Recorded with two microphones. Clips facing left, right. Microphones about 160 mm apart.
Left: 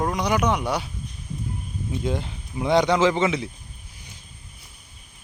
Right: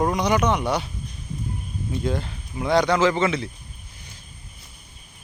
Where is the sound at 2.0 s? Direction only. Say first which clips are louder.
Right 1 dB; 15° left (ahead or behind).